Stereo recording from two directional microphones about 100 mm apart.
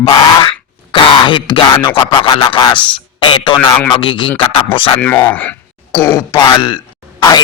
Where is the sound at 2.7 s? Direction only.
55° left (ahead or behind).